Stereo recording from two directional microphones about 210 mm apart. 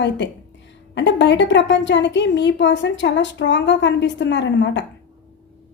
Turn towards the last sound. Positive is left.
turn(degrees=55)  # may be behind; listen again after turning